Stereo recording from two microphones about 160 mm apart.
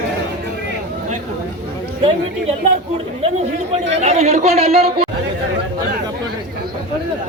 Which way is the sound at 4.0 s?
45° right (ahead or behind).